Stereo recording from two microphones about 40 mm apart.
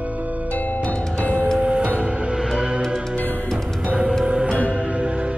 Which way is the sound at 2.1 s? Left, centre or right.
Right.